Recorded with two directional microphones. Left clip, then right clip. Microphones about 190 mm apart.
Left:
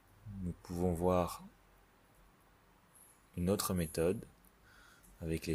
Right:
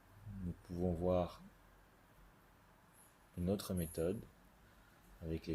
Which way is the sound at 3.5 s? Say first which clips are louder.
Left 5 dB; 45° left (ahead or behind).